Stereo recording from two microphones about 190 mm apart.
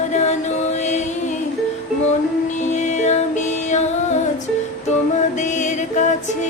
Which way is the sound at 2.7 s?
40° left (ahead or behind).